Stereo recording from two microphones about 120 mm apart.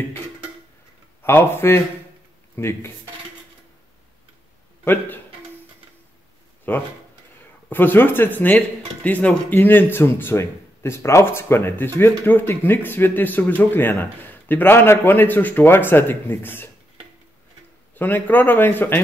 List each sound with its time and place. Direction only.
1.2 s speech: 20° left (ahead or behind)
4.8 s speech: 15° left (ahead or behind)
6.7 s speech: 15° left (ahead or behind)
17.9 s speech: 15° left (ahead or behind)